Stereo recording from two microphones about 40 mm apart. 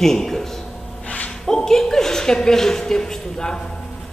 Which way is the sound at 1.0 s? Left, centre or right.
Left.